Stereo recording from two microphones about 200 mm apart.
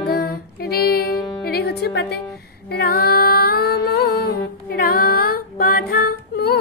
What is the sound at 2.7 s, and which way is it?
Child singing, 50° left (ahead or behind).